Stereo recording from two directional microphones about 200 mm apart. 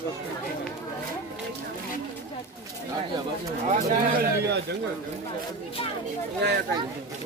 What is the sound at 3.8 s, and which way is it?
Speech, 45° right (ahead or behind).